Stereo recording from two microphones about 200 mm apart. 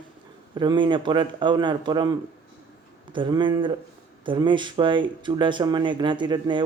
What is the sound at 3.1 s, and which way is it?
Speech, 25° right (ahead or behind).